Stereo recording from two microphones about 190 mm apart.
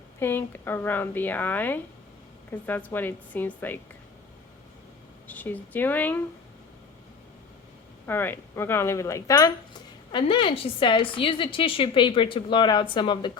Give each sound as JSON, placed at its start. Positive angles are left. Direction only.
{"t": 0.2, "sound": "a woman's voice", "side_deg": 10}
{"t": 5.3, "sound": "a woman's voice", "side_deg": 10}
{"t": 8.0, "sound": "a woman's voice", "side_deg": 10}